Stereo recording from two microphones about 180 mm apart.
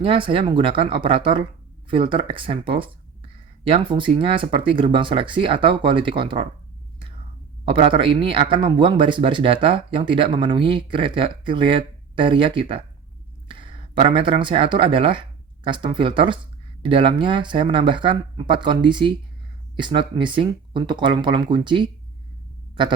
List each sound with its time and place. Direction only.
0.0 s speech: 30° right (ahead or behind)
7.6 s speech: 30° right (ahead or behind)